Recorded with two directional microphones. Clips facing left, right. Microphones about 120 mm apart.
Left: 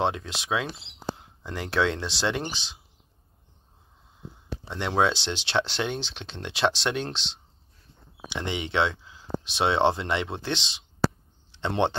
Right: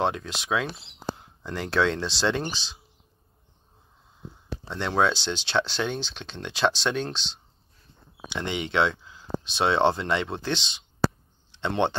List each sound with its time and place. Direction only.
0.0 s speech: 25° left (ahead or behind)
4.6 s speech: 20° left (ahead or behind)
8.3 s speech: 25° left (ahead or behind)